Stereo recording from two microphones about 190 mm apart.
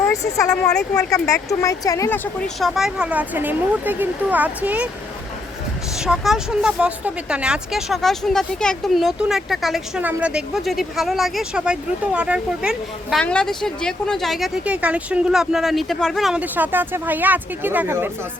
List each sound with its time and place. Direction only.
0.1 s speech: 15° left (ahead or behind)
2.6 s speech: centre (ahead or behind)
6.0 s speech: centre (ahead or behind)